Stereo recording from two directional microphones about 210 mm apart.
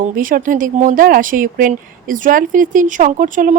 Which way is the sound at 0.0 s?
40° right (ahead or behind).